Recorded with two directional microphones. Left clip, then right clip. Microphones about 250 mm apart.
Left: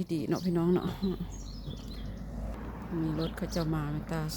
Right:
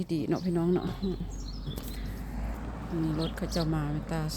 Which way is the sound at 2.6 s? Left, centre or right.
Right.